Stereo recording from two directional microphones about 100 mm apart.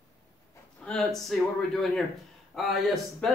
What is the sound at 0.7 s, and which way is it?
Speech, 10° left (ahead or behind).